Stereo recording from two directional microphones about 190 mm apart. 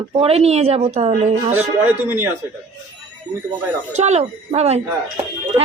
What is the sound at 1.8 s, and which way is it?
Speech, 10° right (ahead or behind).